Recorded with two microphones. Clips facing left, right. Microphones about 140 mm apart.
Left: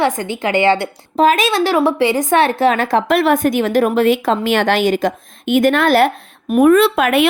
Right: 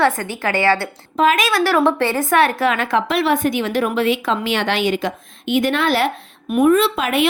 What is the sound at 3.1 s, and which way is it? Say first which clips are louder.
A woman's voice: left 5 dB; 45° left (ahead or behind).